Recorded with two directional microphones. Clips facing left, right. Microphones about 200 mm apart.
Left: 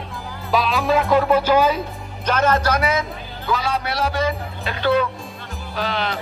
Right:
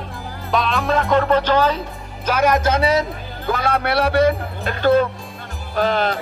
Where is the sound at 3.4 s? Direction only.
55° right (ahead or behind).